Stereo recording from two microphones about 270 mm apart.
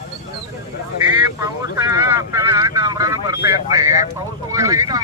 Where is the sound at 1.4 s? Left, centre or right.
Centre.